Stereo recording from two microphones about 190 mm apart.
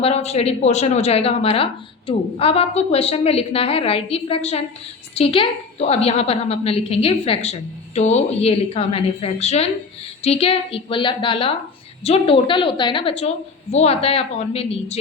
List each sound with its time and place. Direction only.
0.0 s a woman's voice: 35° left (ahead or behind)